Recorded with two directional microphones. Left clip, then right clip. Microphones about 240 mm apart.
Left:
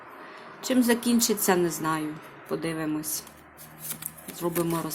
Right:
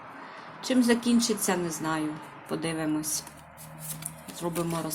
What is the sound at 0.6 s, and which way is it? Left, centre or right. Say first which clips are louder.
Speech: left 1 dB; centre.